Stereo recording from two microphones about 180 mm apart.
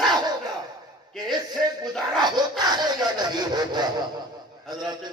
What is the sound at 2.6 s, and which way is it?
A man's voice, 25° right (ahead or behind).